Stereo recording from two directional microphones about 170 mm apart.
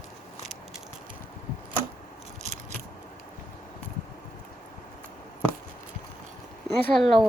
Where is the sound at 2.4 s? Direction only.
45° right (ahead or behind).